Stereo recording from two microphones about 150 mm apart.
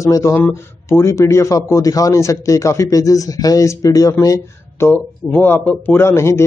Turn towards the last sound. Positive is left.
turn(degrees=15)  # may be behind; listen again after turning